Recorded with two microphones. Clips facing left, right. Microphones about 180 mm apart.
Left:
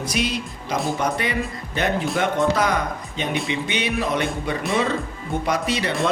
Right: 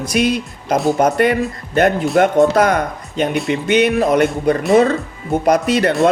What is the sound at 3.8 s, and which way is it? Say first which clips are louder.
Speech: right 8 dB; 50° right (ahead or behind).